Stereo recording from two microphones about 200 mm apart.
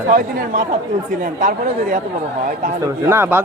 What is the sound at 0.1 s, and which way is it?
Speech, 45° right (ahead or behind).